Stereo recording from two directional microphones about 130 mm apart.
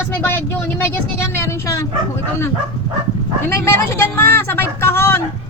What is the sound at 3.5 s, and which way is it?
Speech, 20° left (ahead or behind).